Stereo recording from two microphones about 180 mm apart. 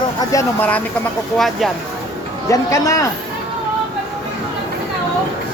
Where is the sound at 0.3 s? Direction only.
15° left (ahead or behind).